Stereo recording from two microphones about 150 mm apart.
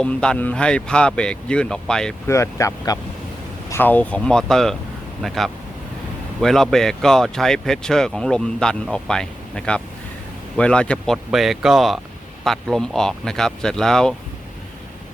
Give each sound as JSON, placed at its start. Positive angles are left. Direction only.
{"t": 0.0, "sound": "speech", "side_deg": 5}
{"t": 2.2, "sound": "speech", "side_deg": 20}